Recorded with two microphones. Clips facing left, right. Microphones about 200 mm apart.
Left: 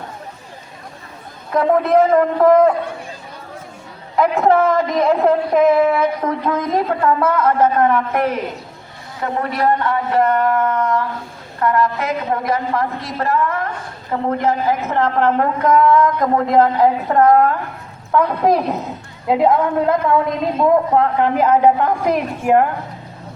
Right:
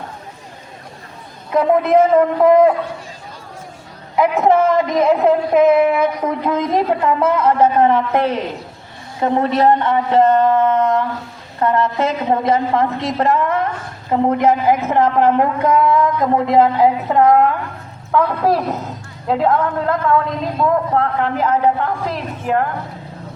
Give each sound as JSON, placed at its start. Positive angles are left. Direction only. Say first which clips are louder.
{"t": 1.5, "sound": "a man's voice", "louder": "right 1 dB", "side_deg": 0}
{"t": 4.2, "sound": "a man's voice", "louder": "right 1 dB", "side_deg": -5}
{"t": 5.9, "sound": "a woman's voice", "louder": "right 1 dB", "side_deg": -15}
{"t": 18.2, "sound": "a woman's voice", "louder": "left 1 dB", "side_deg": 15}